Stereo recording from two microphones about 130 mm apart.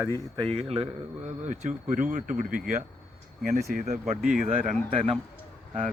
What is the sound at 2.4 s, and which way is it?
Speech, 90° right.